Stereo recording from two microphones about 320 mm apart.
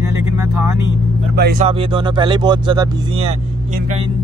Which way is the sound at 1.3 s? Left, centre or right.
Right.